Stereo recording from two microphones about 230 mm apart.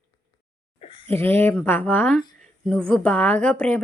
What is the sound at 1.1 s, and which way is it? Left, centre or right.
Speech, centre.